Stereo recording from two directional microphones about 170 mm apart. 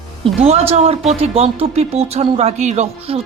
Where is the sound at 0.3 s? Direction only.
35° right (ahead or behind).